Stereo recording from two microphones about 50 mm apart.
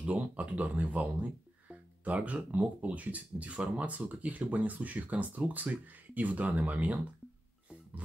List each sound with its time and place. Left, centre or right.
0.0 s speech: right